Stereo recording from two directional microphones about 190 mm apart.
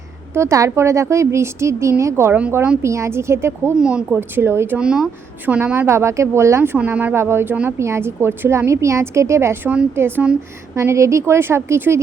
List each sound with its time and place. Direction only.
0.3 s speech: 15° right (ahead or behind)